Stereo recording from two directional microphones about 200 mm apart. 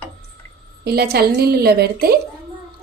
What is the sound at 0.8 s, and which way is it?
A woman's voice, 50° right (ahead or behind).